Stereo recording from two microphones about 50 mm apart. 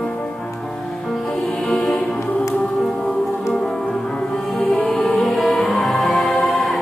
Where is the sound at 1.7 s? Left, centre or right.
Centre.